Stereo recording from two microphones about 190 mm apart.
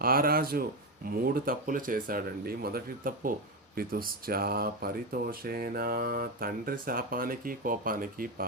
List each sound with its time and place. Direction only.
0.0 s speech: 50° right (ahead or behind)